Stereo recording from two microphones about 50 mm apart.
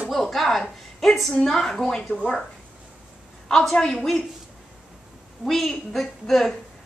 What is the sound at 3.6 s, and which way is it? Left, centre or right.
Speech, centre.